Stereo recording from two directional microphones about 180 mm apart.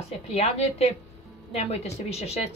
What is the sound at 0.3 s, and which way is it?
A woman's voice, 35° left (ahead or behind).